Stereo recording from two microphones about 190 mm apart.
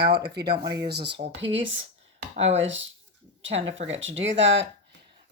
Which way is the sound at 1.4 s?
75° right (ahead or behind).